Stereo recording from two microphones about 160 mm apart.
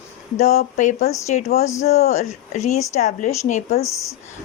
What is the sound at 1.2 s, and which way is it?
Speech, 45° left (ahead or behind).